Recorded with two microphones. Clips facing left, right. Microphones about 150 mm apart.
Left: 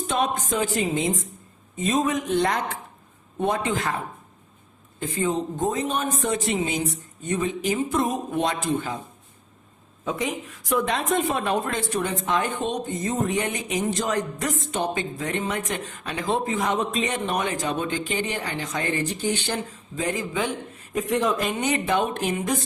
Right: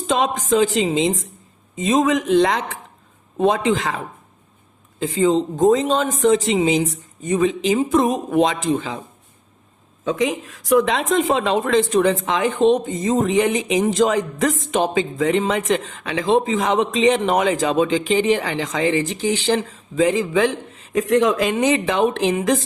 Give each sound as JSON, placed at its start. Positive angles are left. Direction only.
{"t": 0.1, "sound": "a woman's voice", "side_deg": -90}
{"t": 10.0, "sound": "a woman's voice", "side_deg": -90}